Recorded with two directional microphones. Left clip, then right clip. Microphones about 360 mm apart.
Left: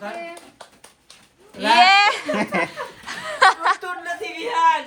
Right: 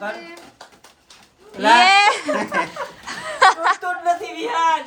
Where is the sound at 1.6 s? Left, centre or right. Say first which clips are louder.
Right 1 dB; centre.